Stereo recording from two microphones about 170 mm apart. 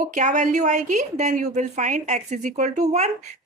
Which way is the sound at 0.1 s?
45° right (ahead or behind).